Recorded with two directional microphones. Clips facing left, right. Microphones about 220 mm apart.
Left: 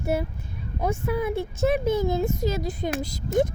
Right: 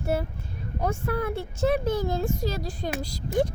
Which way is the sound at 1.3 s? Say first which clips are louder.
Left 4 dB; 10° right (ahead or behind).